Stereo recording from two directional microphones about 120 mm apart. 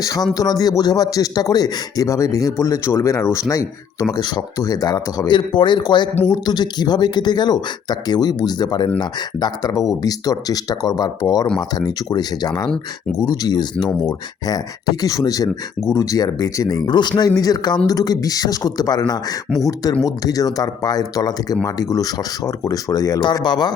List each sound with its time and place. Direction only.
0.3 s a man's voice: 30° left (ahead or behind)
4.1 s speech: 35° left (ahead or behind)
12.6 s speech: 5° left (ahead or behind)
13.1 s a man's voice: 30° left (ahead or behind)